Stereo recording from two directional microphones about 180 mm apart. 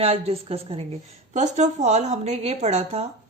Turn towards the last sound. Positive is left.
turn(degrees=-35)  # may be behind; listen again after turning